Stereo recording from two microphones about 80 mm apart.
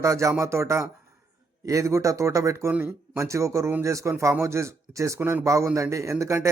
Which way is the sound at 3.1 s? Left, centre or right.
Right.